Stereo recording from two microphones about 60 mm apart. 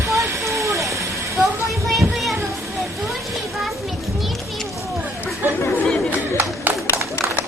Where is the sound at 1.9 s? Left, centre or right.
Centre.